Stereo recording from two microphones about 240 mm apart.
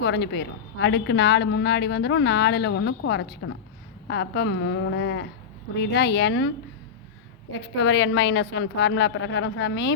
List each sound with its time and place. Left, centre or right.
0.0 s a woman's voice: left
7.8 s a woman's voice: left